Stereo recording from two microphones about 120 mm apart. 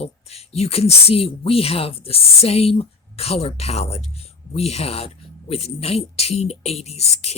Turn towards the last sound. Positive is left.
turn(degrees=60)  # may be behind; listen again after turning